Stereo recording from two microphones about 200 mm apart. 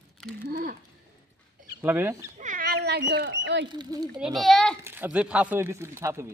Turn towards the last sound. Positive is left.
turn(degrees=-15)  # may be behind; listen again after turning